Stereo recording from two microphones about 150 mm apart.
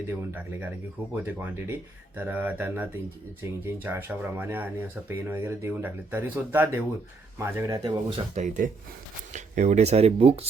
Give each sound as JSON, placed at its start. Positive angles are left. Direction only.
{"t": 0.1, "sound": "speech", "side_deg": -15}
{"t": 8.4, "sound": "speech", "side_deg": -60}